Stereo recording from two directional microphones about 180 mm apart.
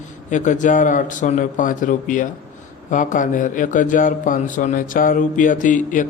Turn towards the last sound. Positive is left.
turn(degrees=45)  # may be behind; listen again after turning